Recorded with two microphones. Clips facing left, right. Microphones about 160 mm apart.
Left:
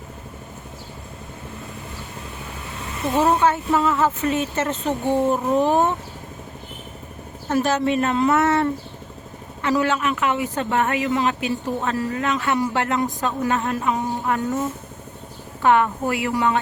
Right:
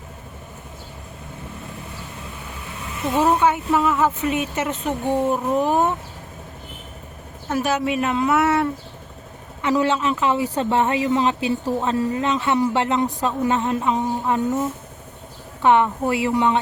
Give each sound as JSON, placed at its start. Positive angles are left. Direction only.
{"t": 3.2, "sound": "speech", "side_deg": -15}
{"t": 7.5, "sound": "speech", "side_deg": -10}
{"t": 9.6, "sound": "speech", "side_deg": -20}
{"t": 15.6, "sound": "speech", "side_deg": -20}